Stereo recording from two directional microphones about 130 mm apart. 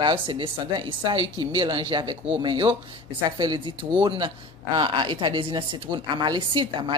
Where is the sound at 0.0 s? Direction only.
40° right (ahead or behind).